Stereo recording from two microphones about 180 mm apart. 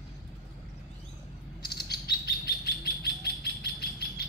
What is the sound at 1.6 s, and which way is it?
Bird, 65° left (ahead or behind).